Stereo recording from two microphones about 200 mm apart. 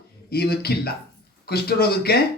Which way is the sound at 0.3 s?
50° left (ahead or behind).